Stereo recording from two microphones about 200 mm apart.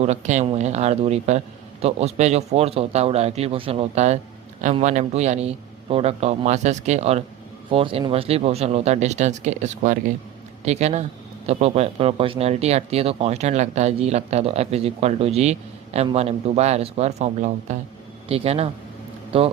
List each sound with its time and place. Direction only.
0.0 s a man's voice: 35° right (ahead or behind)